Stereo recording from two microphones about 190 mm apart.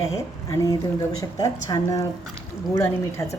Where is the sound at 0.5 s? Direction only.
15° left (ahead or behind).